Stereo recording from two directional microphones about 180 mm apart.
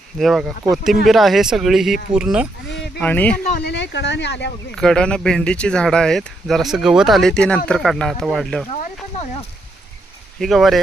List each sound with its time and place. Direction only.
0.2 s speech: centre (ahead or behind)
2.6 s a sound: 70° left (ahead or behind)
3.0 s speech: 10° left (ahead or behind)
3.6 s speech: 70° left (ahead or behind)
4.7 s speech: 5° left (ahead or behind)
10.4 s speech: centre (ahead or behind)